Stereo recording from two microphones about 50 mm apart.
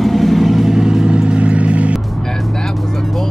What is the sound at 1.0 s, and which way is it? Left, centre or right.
Vehicle, right.